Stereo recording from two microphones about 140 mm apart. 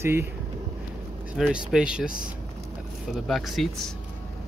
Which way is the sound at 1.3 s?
5° right (ahead or behind).